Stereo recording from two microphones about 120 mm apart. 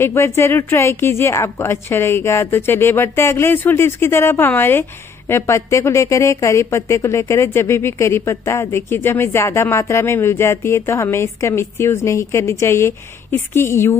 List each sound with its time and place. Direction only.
0.0 s speech: 20° left (ahead or behind)